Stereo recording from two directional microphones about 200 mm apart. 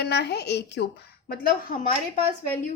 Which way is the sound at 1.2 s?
45° left (ahead or behind).